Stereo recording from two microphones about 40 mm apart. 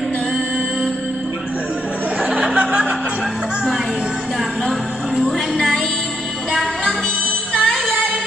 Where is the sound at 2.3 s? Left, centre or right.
Right.